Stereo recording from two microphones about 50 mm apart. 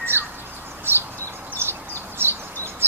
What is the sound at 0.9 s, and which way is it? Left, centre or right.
Bird, right.